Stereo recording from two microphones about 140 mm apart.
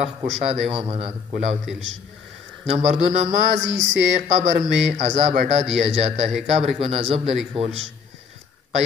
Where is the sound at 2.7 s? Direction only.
55° right (ahead or behind).